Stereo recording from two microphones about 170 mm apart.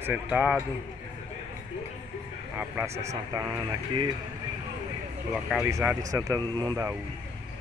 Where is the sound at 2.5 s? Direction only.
15° right (ahead or behind).